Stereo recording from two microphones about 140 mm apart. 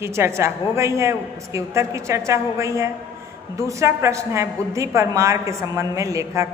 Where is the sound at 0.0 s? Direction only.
20° right (ahead or behind).